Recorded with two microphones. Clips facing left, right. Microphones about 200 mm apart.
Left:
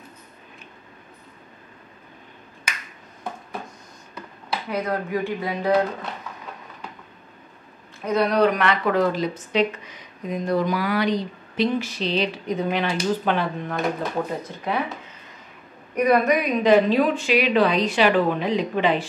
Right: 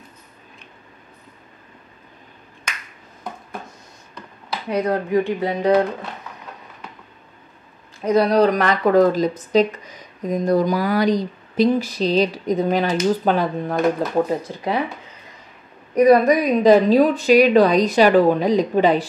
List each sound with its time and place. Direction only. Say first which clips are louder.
4.6 s speech: right 6 dB; 30° right (ahead or behind)
8.0 s speech: right 4 dB; 35° right (ahead or behind)
15.9 s speech: right 6 dB; 35° right (ahead or behind)